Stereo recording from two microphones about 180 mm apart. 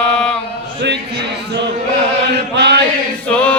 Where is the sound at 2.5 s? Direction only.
70° right (ahead or behind).